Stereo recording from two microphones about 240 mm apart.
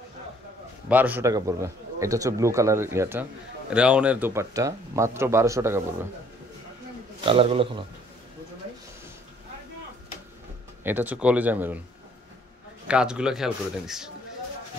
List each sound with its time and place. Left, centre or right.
0.8 s a man's voice: centre
7.2 s a man's voice: right
10.8 s a man's voice: centre
12.8 s a man's voice: centre